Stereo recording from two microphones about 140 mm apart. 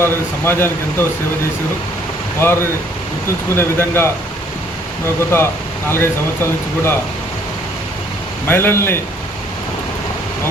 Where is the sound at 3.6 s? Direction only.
15° left (ahead or behind).